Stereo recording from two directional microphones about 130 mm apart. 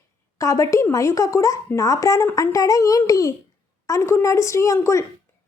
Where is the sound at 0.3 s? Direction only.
25° left (ahead or behind).